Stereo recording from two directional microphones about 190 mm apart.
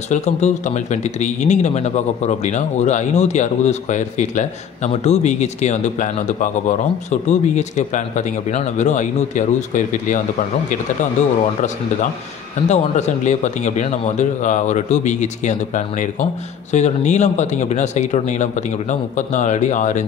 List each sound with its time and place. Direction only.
0.1 s speech: 40° left (ahead or behind)
12.6 s speech: 35° left (ahead or behind)